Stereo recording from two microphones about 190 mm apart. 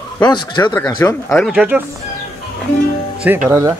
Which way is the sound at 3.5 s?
15° right (ahead or behind).